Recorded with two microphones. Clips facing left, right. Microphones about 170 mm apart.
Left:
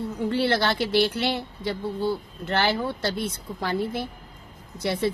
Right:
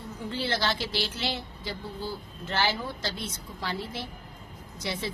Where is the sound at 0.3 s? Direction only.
60° left (ahead or behind).